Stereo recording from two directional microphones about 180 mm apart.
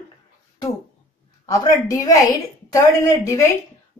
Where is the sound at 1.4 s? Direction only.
20° left (ahead or behind).